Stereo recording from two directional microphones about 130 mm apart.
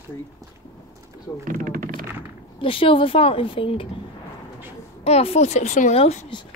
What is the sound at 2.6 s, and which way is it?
Speech, 40° left (ahead or behind).